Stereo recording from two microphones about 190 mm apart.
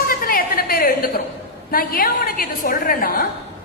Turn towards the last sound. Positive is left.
turn(degrees=50)  # may be behind; listen again after turning